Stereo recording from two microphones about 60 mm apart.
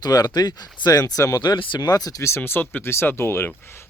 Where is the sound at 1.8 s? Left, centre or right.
Left.